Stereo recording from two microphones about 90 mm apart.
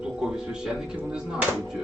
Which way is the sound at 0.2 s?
10° right (ahead or behind).